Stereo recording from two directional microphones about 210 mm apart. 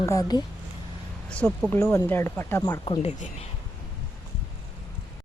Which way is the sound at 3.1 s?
35° left (ahead or behind).